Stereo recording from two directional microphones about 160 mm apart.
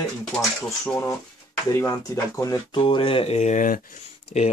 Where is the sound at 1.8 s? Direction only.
20° left (ahead or behind).